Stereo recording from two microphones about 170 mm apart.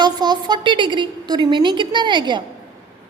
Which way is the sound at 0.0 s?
25° right (ahead or behind).